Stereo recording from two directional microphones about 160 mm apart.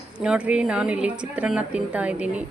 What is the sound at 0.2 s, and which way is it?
A woman's voice, 5° right (ahead or behind).